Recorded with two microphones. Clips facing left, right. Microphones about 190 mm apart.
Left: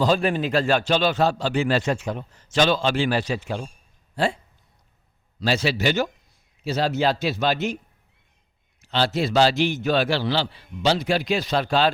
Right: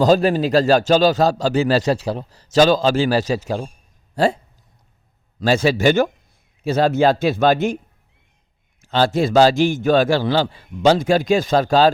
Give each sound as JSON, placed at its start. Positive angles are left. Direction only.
{"t": 0.0, "sound": "a man's voice", "side_deg": -40}
{"t": 5.4, "sound": "a man's voice", "side_deg": -50}
{"t": 8.8, "sound": "a man's voice", "side_deg": -45}